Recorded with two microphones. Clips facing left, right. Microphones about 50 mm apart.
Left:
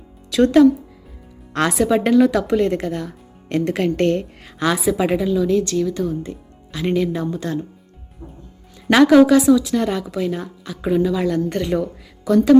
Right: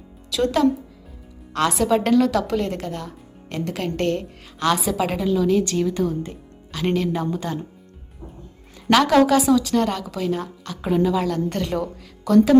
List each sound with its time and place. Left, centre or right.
0.3 s a woman's voice: left
1.9 s a woman's voice: centre; by 4.5 s left
4.7 s a woman's voice: centre
7.1 s a woman's voice: centre
8.9 s a woman's voice: centre
11.3 s a woman's voice: centre